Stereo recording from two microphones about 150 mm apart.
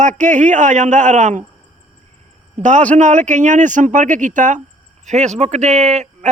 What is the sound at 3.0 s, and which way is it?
A man's voice, 55° right (ahead or behind).